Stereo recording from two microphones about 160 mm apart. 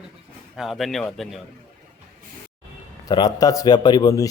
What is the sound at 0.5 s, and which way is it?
Speech, centre (ahead or behind).